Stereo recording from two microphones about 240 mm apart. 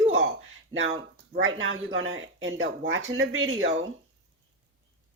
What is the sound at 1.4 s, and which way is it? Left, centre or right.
Speech, right.